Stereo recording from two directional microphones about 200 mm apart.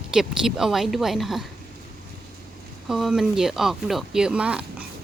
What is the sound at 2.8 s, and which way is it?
Speech, centre (ahead or behind).